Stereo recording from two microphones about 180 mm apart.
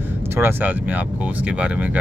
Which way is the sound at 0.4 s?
10° right (ahead or behind).